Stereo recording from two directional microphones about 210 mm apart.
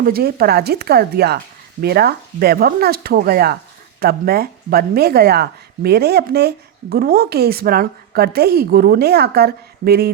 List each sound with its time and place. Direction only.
0.0 s a woman's voice: 45° right (ahead or behind)